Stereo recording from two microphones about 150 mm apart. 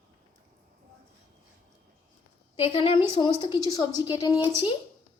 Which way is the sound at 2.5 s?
40° left (ahead or behind).